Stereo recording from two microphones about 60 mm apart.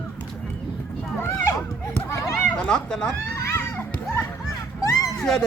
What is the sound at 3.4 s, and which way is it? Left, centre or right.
Children playing, left.